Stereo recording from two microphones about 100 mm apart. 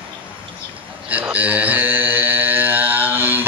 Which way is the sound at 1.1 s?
15° right (ahead or behind).